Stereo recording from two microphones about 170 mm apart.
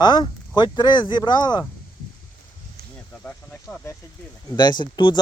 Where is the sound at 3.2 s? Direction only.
10° left (ahead or behind).